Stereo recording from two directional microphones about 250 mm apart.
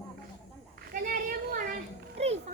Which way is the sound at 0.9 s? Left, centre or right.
Right.